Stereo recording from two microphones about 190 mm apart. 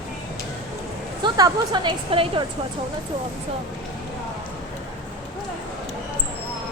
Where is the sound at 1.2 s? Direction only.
20° right (ahead or behind).